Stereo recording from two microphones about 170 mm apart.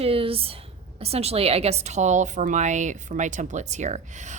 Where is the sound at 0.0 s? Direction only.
35° right (ahead or behind).